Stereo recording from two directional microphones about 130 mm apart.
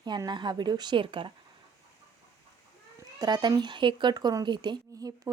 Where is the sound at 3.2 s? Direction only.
35° right (ahead or behind).